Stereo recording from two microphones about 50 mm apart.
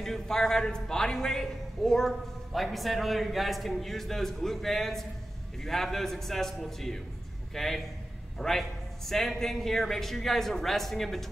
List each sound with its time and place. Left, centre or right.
0.0 s a man's voice: centre